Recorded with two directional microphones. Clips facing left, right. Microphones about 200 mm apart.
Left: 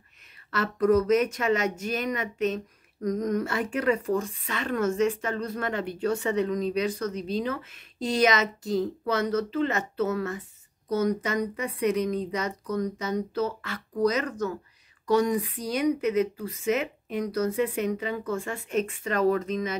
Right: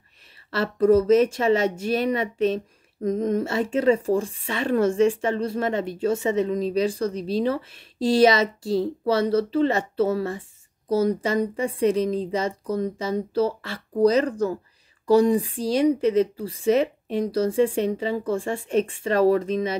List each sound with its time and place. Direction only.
0.5 s a woman's voice: 30° right (ahead or behind)